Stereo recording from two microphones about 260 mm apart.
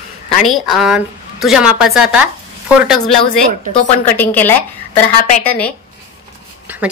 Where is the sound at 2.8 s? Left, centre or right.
Centre.